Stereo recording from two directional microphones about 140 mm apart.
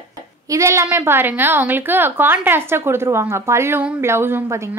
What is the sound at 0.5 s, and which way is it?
A woman's voice, 20° right (ahead or behind).